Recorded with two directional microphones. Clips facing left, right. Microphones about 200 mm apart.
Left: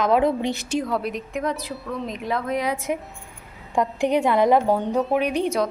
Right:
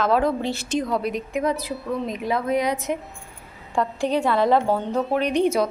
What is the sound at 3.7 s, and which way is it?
A woman's voice, 20° left (ahead or behind).